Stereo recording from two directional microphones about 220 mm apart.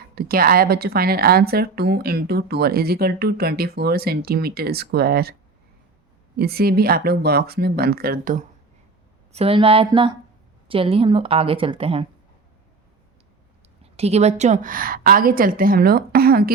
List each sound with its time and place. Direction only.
0.2 s a woman's voice: 45° right (ahead or behind)
6.3 s a woman's voice: 45° right (ahead or behind); by 12.0 s 25° right (ahead or behind)
13.9 s a woman's voice: 30° right (ahead or behind)